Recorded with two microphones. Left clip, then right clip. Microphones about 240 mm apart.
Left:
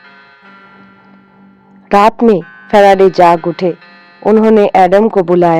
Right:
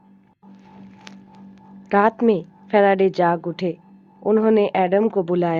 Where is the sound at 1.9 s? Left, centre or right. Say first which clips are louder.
Left 9 dB; left.